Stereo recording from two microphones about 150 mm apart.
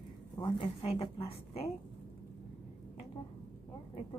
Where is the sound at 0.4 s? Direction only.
35° left (ahead or behind).